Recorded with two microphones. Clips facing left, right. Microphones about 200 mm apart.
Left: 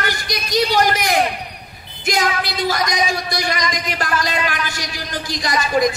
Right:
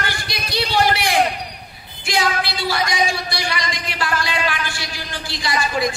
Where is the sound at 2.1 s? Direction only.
40° left (ahead or behind).